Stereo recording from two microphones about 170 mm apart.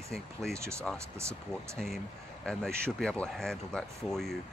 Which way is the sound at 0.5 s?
15° right (ahead or behind).